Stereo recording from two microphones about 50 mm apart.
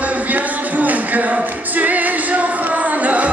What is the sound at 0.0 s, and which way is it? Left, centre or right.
Music, right.